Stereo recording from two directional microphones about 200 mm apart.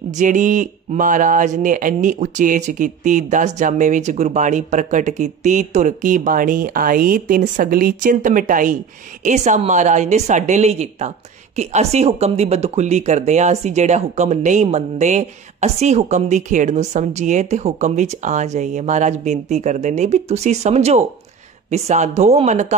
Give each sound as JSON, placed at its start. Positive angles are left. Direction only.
{"t": 0.2, "sound": "speech", "side_deg": -40}